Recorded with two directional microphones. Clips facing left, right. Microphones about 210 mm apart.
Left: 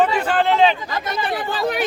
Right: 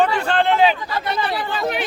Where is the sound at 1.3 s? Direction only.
40° left (ahead or behind).